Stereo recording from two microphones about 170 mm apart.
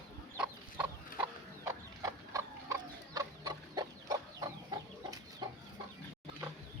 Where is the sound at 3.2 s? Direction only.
25° right (ahead or behind).